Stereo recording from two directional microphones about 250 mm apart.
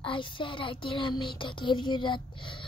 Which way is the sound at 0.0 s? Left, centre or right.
Centre.